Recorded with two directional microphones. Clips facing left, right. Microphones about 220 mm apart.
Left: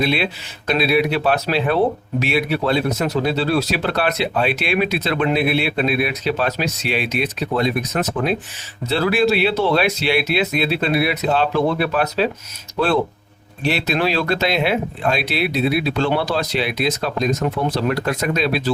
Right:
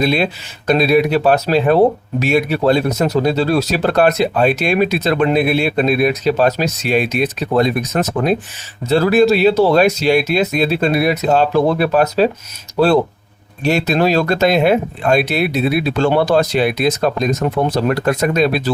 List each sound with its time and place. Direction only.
0.0 s speech: 40° right (ahead or behind)
13.7 s speech: 45° right (ahead or behind)